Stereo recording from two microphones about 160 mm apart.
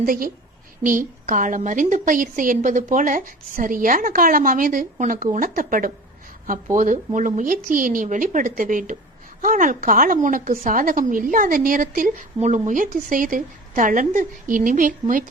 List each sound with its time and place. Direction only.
0.0 s a woman's voice: 60° right (ahead or behind)